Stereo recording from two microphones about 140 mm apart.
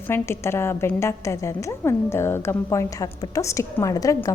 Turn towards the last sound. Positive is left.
turn(degrees=25)  # may be behind; listen again after turning